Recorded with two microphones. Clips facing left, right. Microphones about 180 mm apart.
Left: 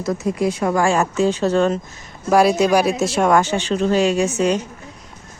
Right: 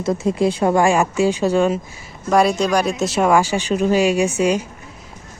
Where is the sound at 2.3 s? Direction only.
5° left (ahead or behind).